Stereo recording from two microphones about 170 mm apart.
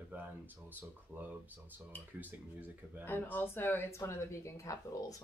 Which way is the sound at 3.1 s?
10° left (ahead or behind).